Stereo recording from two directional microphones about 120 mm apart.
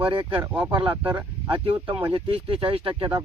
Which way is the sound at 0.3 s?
15° right (ahead or behind).